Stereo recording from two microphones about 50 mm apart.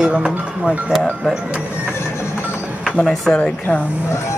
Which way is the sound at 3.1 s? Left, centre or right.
Centre.